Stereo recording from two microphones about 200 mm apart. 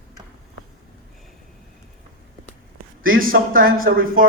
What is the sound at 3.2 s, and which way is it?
Speech, 45° right (ahead or behind).